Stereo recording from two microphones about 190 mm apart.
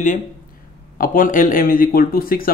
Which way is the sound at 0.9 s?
45° left (ahead or behind).